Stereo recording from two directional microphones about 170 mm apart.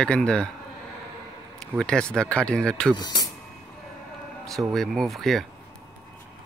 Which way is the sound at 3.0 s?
25° left (ahead or behind).